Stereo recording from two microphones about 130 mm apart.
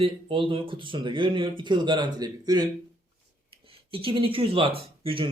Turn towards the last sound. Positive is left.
turn(degrees=-45)  # may be behind; listen again after turning